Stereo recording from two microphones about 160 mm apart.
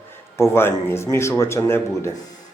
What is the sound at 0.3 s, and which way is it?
Speech, 15° left (ahead or behind).